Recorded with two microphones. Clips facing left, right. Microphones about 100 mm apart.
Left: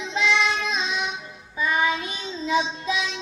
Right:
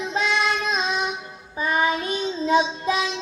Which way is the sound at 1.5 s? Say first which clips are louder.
Right 1 dB; 40° right (ahead or behind).